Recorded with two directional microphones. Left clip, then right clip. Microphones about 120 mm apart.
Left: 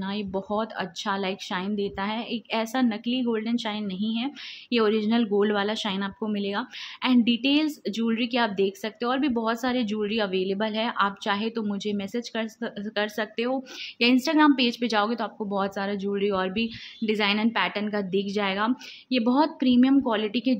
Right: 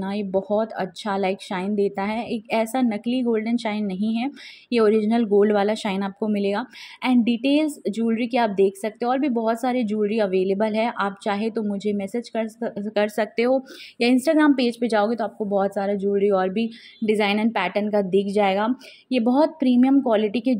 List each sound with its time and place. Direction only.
0.0 s a woman's voice: 25° right (ahead or behind)
13.6 s a woman's voice: 20° right (ahead or behind)